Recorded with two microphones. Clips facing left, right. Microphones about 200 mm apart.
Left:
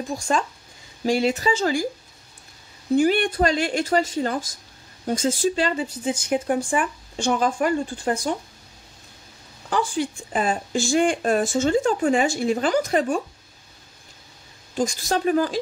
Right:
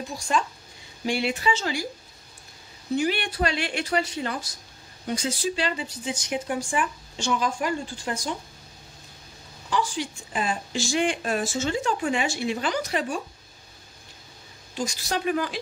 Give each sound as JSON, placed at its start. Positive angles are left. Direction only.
{"t": 0.3, "sound": "a woman's voice", "side_deg": 40}
{"t": 3.0, "sound": "speech", "side_deg": 45}
{"t": 9.7, "sound": "speech", "side_deg": 50}
{"t": 14.7, "sound": "a woman's voice", "side_deg": 45}